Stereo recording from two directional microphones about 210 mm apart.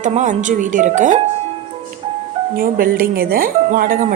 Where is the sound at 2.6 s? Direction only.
45° right (ahead or behind).